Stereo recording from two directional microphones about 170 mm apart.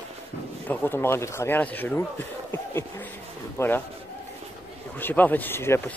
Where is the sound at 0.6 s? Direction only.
15° left (ahead or behind).